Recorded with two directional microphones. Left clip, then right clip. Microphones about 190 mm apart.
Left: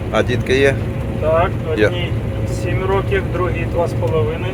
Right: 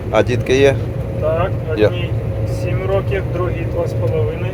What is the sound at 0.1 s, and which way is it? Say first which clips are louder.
Speech: right 2 dB; 10° right (ahead or behind).